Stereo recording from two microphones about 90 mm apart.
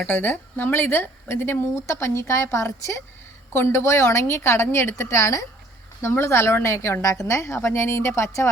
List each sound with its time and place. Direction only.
0.1 s speech: 20° left (ahead or behind)